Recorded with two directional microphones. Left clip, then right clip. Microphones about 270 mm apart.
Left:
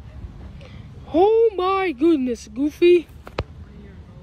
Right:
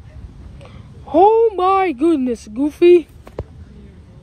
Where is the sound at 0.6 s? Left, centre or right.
Centre.